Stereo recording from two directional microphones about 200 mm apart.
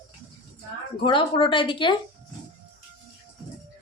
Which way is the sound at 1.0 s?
25° left (ahead or behind).